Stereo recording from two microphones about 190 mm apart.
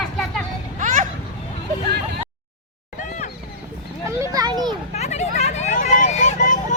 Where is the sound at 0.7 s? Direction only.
40° right (ahead or behind).